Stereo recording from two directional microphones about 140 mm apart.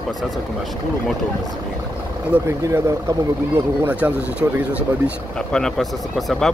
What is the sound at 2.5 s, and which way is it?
Speech, 20° right (ahead or behind).